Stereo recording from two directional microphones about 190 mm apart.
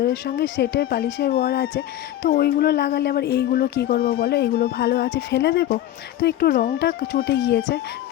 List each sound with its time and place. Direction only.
0.0 s speech: 55° left (ahead or behind)
5.1 s speech: 60° left (ahead or behind)